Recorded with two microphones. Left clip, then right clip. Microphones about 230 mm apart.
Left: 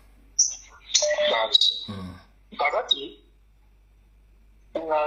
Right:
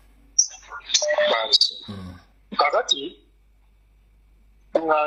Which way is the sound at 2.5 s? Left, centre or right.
Right.